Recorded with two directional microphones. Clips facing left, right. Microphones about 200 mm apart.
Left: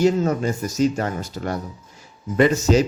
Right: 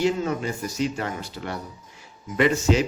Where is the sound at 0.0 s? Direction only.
45° left (ahead or behind).